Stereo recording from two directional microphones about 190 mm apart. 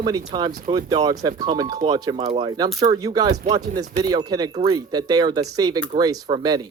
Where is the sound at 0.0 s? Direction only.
20° right (ahead or behind).